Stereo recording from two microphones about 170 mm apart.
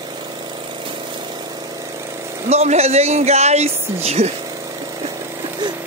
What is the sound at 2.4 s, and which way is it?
Speech, 40° right (ahead or behind).